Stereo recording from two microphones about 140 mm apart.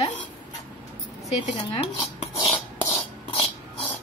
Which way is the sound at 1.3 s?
55° left (ahead or behind).